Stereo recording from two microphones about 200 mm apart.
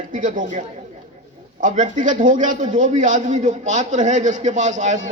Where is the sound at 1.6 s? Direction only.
40° right (ahead or behind).